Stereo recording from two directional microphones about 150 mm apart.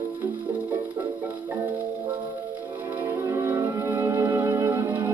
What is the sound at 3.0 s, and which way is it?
Music, 15° right (ahead or behind).